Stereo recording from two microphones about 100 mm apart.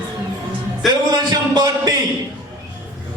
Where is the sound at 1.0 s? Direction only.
45° right (ahead or behind).